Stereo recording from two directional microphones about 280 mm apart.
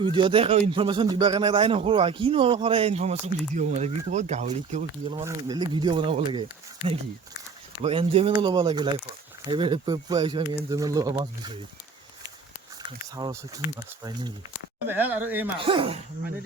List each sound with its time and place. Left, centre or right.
0.0 s a man's voice: centre
7.8 s speech: centre
13.0 s speech: centre
15.5 s a man's voice: centre